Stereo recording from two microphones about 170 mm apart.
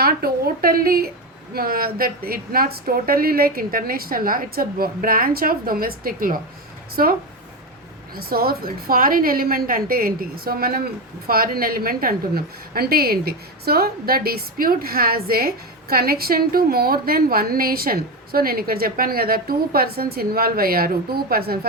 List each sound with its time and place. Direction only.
0.0 s a woman's voice: 65° right (ahead or behind)